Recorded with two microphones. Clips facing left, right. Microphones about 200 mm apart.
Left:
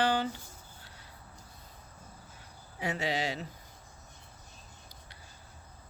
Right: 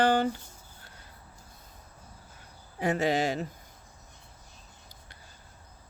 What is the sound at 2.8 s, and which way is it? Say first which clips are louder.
Speech: right 6 dB; 50° right (ahead or behind).